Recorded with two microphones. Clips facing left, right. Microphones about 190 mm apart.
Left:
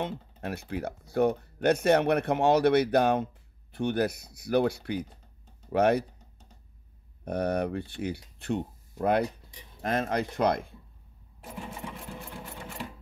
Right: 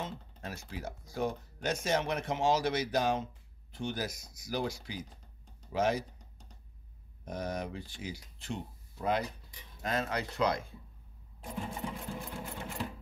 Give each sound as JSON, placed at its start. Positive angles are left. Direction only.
{"t": 0.0, "sound": "speech", "side_deg": 60}
{"t": 7.2, "sound": "speech", "side_deg": 60}